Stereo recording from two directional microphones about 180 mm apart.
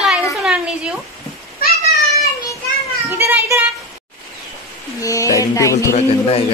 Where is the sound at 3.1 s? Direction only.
15° right (ahead or behind).